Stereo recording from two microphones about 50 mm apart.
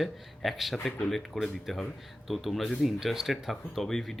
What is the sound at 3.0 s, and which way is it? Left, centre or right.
Speech, centre.